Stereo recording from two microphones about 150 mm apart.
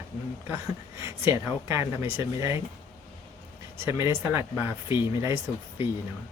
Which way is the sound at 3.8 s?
20° right (ahead or behind).